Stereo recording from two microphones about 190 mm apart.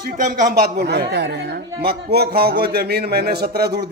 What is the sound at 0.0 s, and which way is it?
A man's voice, 45° right (ahead or behind).